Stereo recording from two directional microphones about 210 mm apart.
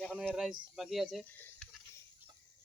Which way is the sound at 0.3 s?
Centre (ahead or behind).